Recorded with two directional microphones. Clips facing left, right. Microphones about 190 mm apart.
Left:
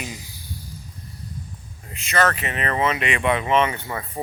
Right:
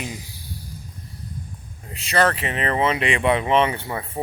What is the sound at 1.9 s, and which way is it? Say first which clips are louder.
Speech: right 1 dB; 35° right (ahead or behind).